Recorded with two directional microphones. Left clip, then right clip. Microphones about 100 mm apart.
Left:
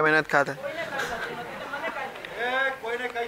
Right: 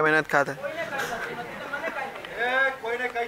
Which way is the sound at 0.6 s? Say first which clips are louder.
Right 1 dB; 5° left (ahead or behind).